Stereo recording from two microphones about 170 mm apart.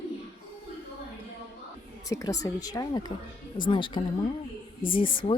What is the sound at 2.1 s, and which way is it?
Speech, 20° left (ahead or behind).